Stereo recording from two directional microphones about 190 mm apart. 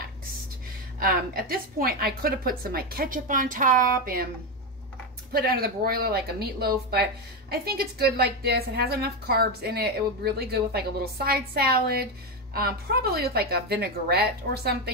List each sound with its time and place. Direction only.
0.9 s a woman's voice: 50° right (ahead or behind)
5.3 s speech: 55° right (ahead or behind)